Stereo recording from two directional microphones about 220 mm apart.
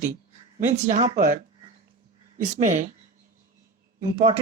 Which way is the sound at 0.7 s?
30° right (ahead or behind).